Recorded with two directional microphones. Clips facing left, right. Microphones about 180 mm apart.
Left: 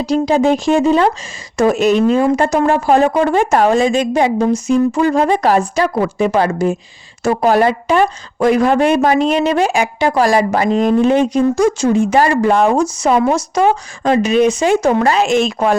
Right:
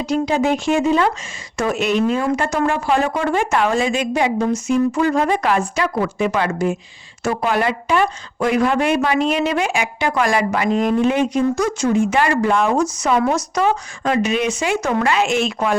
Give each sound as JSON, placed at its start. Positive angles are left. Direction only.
{"t": 0.0, "sound": "speech", "side_deg": 35}